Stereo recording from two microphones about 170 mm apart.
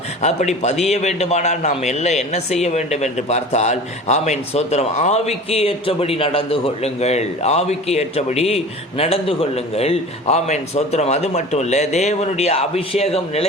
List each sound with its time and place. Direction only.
0.2 s a man's voice: 40° left (ahead or behind)